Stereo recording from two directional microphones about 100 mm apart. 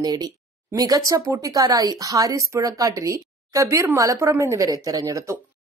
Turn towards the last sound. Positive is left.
turn(degrees=-35)  # may be behind; listen again after turning